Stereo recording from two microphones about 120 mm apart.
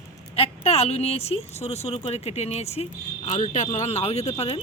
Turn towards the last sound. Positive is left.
turn(degrees=60)  # may be behind; listen again after turning